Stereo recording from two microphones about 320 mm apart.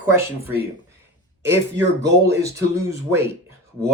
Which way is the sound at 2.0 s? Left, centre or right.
Centre.